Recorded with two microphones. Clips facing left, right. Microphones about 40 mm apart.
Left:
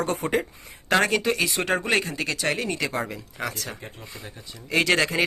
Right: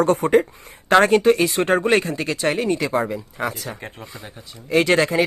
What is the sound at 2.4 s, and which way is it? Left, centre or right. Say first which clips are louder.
Speech: right 7 dB; centre.